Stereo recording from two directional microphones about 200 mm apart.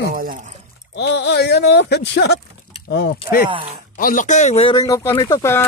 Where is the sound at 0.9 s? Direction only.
55° left (ahead or behind).